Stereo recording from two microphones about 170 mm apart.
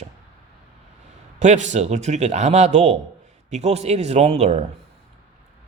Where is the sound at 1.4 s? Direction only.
45° right (ahead or behind).